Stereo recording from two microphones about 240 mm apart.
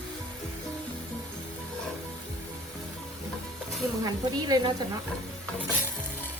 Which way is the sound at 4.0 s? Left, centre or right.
Centre.